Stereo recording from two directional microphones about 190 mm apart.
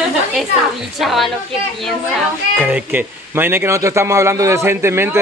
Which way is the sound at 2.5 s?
10° right (ahead or behind).